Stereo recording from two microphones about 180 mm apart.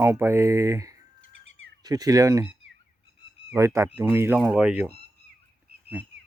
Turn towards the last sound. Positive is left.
turn(degrees=-5)  # may be behind; listen again after turning